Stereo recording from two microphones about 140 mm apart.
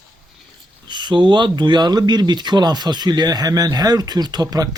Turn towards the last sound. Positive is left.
turn(degrees=-25)  # may be behind; listen again after turning